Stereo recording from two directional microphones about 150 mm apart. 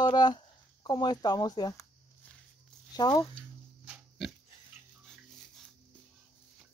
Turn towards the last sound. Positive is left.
turn(degrees=0)  # may be behind; listen again after turning